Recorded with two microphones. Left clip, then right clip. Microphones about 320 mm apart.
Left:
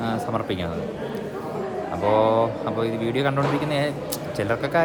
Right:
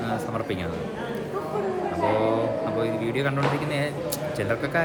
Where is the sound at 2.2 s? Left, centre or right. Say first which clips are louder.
Left 4 dB; centre.